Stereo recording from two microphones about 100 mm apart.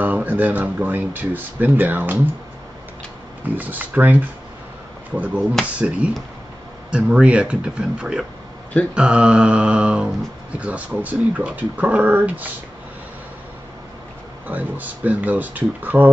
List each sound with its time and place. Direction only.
0.0 s speech: 15° right (ahead or behind)
3.5 s speech: 15° right (ahead or behind)
14.5 s speech: 15° right (ahead or behind)